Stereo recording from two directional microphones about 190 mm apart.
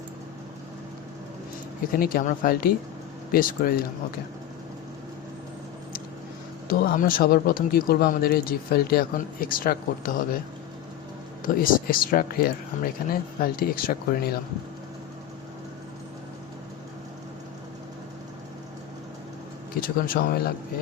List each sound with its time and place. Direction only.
1.9 s speech: 50° left (ahead or behind)
6.7 s speech: 50° left (ahead or behind)
11.4 s speech: 50° left (ahead or behind)
20.1 s speech: 55° left (ahead or behind)